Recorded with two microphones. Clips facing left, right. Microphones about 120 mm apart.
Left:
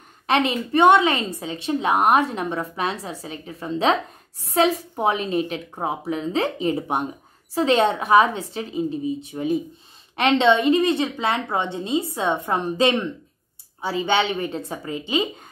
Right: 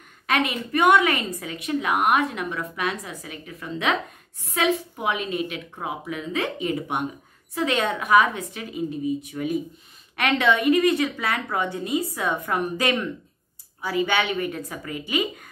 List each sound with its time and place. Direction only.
0.3 s a woman's voice: 30° left (ahead or behind)